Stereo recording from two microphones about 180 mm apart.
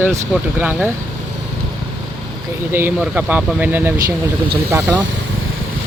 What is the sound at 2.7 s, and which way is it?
Speech, 10° right (ahead or behind).